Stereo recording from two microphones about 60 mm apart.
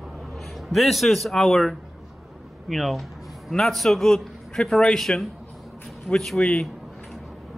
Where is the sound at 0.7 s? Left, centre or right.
Centre.